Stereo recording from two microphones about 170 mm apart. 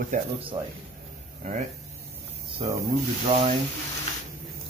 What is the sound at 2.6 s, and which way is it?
Speech, 30° right (ahead or behind).